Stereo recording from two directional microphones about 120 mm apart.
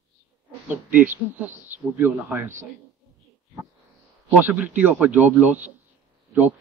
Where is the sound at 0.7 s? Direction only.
15° right (ahead or behind).